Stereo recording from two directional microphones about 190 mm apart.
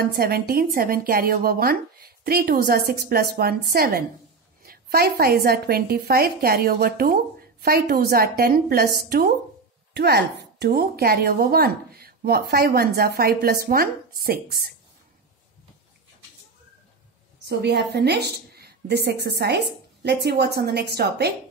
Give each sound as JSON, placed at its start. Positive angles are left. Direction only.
{"t": 0.0, "sound": "speech", "side_deg": -50}
{"t": 17.5, "sound": "a woman's voice", "side_deg": -60}